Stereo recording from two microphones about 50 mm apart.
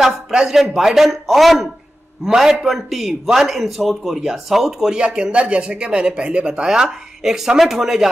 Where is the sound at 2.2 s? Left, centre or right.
Centre.